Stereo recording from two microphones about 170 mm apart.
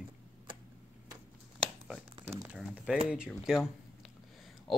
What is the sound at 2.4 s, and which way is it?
Speech, 5° right (ahead or behind).